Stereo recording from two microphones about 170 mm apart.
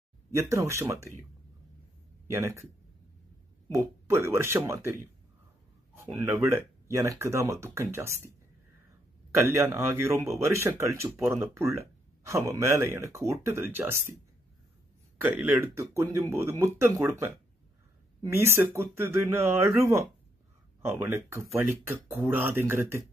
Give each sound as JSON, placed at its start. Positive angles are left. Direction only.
{"t": 0.3, "sound": "speech", "side_deg": -15}
{"t": 2.2, "sound": "speech", "side_deg": -15}
{"t": 3.7, "sound": "speech", "side_deg": -15}
{"t": 5.9, "sound": "speech", "side_deg": -15}
{"t": 9.3, "sound": "speech", "side_deg": -15}
{"t": 15.1, "sound": "speech", "side_deg": -10}